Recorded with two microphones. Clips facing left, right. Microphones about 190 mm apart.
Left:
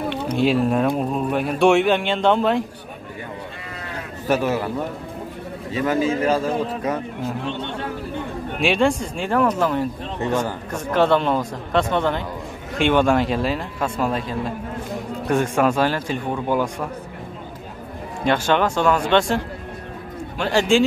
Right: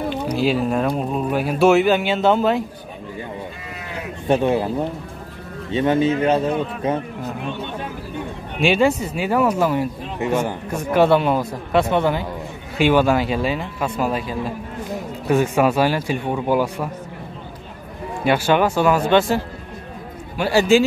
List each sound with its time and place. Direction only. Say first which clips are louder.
0.3 s speech: left 2 dB; centre (ahead or behind)
4.3 s speech: right 3 dB; 25° right (ahead or behind)
7.4 s speech: left 1 dB; 10° right (ahead or behind)
18.2 s speech: right 2 dB; 10° right (ahead or behind)